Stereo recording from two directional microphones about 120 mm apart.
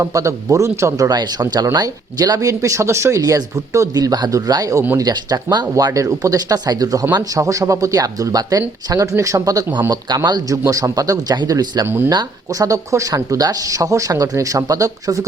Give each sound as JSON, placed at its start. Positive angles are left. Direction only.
{"t": 0.0, "sound": "speech", "side_deg": -25}
{"t": 5.0, "sound": "a man's voice", "side_deg": -35}
{"t": 11.9, "sound": "speech", "side_deg": -20}
{"t": 12.1, "sound": "speech", "side_deg": -30}